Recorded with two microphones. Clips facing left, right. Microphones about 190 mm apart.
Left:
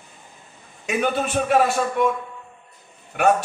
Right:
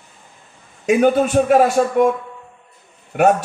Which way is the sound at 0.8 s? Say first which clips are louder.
Right 9 dB; 45° right (ahead or behind).